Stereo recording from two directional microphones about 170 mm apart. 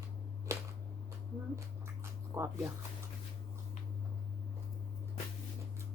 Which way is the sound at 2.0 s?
15° right (ahead or behind).